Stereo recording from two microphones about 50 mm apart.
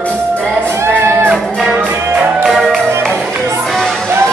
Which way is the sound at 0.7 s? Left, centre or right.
Right.